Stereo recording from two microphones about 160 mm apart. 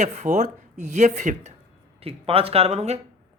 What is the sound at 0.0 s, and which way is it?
Speech, 50° right (ahead or behind).